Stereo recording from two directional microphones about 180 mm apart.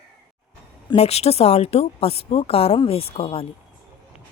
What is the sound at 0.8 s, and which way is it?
Speech, 35° left (ahead or behind).